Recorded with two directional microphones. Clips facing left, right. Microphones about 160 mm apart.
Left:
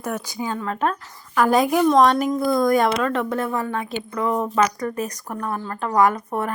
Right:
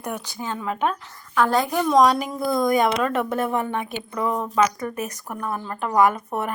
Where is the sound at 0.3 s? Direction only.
10° left (ahead or behind).